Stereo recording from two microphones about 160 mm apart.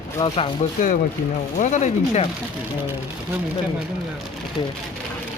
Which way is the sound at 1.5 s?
50° left (ahead or behind).